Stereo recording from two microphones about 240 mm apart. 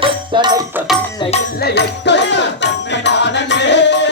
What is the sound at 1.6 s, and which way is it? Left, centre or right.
Music, left.